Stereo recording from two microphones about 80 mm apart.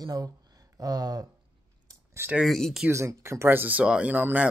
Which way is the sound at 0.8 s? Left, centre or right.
Right.